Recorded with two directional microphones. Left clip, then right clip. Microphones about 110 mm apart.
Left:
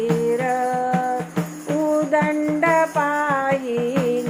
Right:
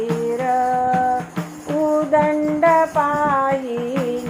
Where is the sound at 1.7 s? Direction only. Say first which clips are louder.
Right 2 dB; 35° right (ahead or behind).